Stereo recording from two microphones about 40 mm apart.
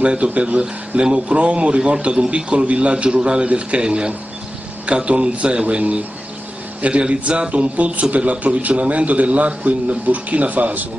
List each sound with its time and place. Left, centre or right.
0.0 s a man's voice: right